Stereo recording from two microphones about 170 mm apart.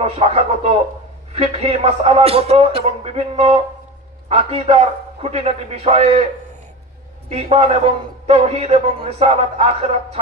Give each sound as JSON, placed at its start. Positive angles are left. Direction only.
{"t": 0.0, "sound": "a man's voice", "side_deg": -35}
{"t": 7.2, "sound": "a man's voice", "side_deg": -35}